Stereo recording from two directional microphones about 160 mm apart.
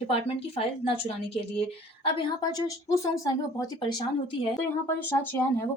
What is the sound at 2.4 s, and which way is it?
Speech, 20° left (ahead or behind).